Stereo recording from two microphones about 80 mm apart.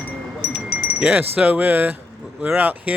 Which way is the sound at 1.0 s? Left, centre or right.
Centre.